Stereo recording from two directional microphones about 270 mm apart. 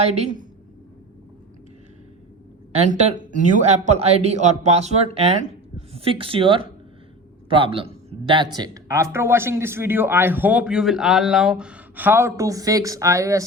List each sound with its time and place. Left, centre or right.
0.0 s a man's voice: right
2.7 s a man's voice: right; by 13.4 s centre